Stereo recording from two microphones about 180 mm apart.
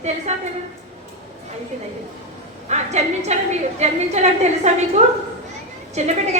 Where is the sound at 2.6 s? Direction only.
40° right (ahead or behind).